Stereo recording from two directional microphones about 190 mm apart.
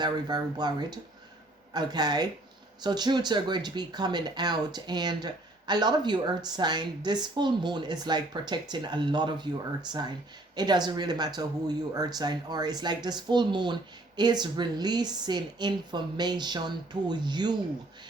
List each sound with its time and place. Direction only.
0.0 s speech: 20° right (ahead or behind)
10.5 s speech: 20° right (ahead or behind)